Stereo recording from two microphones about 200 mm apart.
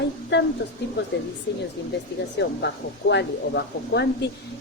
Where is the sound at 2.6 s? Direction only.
60° left (ahead or behind).